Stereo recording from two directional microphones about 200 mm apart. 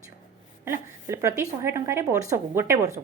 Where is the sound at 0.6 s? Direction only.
10° right (ahead or behind).